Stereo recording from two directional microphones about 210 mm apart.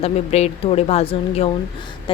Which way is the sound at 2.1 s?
25° left (ahead or behind).